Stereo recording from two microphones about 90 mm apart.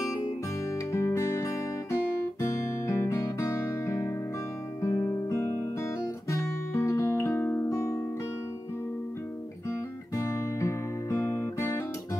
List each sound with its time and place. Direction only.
0.9 s music: 30° left (ahead or behind)
4.8 s guitar: 30° left (ahead or behind)
6.3 s music: 30° left (ahead or behind)
10.1 s music: 30° left (ahead or behind)